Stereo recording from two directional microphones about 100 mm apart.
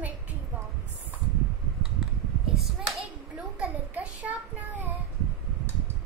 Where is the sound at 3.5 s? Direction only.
10° right (ahead or behind).